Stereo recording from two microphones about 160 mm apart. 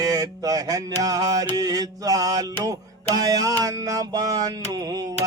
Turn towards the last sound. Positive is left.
turn(degrees=-25)  # may be behind; listen again after turning